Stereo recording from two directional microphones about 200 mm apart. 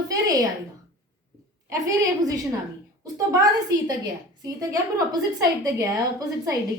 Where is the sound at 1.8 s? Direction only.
15° right (ahead or behind).